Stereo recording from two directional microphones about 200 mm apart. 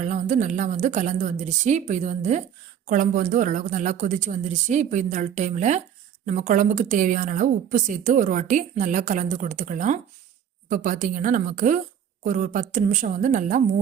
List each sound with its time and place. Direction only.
0.0 s a woman's voice: 35° right (ahead or behind)